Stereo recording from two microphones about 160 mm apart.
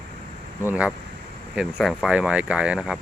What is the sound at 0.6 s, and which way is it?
Speech, 10° right (ahead or behind).